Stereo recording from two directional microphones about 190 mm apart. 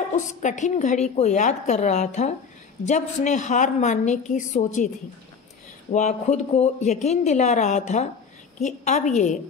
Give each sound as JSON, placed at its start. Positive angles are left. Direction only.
{"t": 0.1, "sound": "speech", "side_deg": 40}
{"t": 5.9, "sound": "speech", "side_deg": 40}